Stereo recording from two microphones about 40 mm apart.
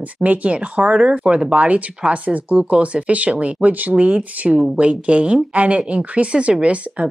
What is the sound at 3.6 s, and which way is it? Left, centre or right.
Speech, right.